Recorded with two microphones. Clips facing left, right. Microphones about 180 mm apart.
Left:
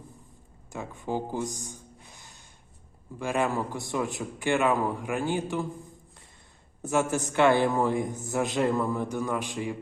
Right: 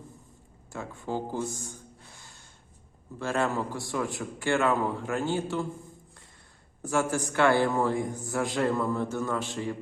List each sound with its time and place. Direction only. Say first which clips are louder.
0.7 s gasp: left 1 dB; 15° left (ahead or behind)
3.2 s a man's voice: left 1 dB; 15° left (ahead or behind)
6.8 s a man's voice: left 1 dB; 20° left (ahead or behind)